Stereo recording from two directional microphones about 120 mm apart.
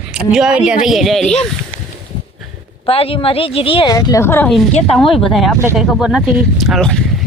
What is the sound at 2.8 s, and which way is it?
Speech, 50° left (ahead or behind).